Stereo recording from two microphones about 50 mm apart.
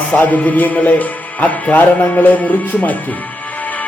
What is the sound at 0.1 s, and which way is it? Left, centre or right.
Speech, left.